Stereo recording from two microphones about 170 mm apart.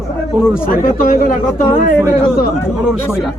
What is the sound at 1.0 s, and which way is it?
Speech, 55° left (ahead or behind).